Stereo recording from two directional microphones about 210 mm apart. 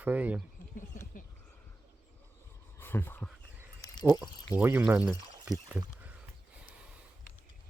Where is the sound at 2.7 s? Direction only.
10° left (ahead or behind).